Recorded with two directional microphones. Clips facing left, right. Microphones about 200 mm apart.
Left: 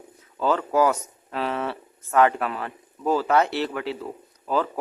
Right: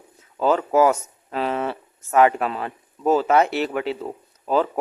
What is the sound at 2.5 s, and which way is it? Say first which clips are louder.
Speech: right 3 dB; 20° right (ahead or behind).